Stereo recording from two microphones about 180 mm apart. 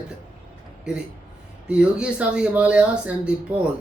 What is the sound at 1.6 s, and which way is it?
Speech, 5° right (ahead or behind).